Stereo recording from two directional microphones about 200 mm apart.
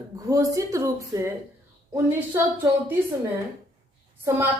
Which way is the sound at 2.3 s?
15° right (ahead or behind).